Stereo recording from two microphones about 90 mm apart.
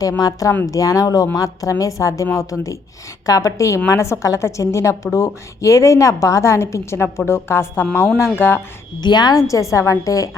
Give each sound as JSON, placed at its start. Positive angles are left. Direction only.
{"t": 0.2, "sound": "a woman's voice", "side_deg": 40}
{"t": 9.0, "sound": "a woman's voice", "side_deg": 55}
{"t": 9.5, "sound": "a woman's voice", "side_deg": 35}